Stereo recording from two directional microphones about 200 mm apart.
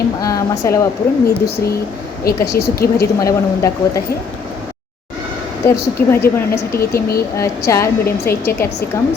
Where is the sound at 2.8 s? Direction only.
50° left (ahead or behind).